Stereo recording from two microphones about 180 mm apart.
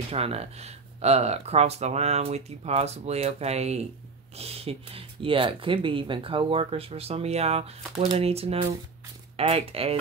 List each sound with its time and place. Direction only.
0.1 s speech: 35° right (ahead or behind)